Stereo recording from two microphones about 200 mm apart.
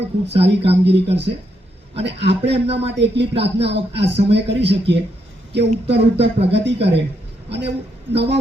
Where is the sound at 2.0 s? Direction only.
60° right (ahead or behind).